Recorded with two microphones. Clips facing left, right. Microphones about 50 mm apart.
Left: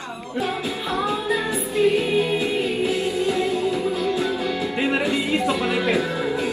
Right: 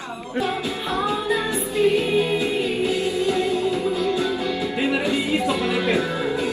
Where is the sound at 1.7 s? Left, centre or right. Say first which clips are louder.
Even; left.